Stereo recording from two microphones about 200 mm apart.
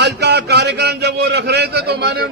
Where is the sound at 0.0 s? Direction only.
60° right (ahead or behind).